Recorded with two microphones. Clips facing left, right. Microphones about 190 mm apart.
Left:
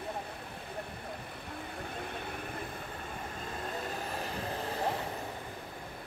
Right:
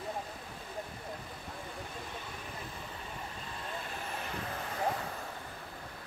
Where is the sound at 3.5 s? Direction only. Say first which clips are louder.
Left 4 dB; 40° left (ahead or behind).